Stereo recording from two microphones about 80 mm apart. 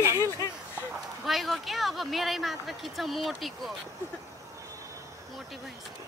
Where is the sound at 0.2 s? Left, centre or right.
Left.